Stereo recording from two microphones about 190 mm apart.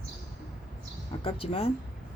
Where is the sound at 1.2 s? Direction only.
30° left (ahead or behind).